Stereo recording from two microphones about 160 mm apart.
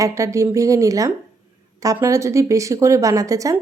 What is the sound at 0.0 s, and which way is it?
A woman's voice, 20° right (ahead or behind).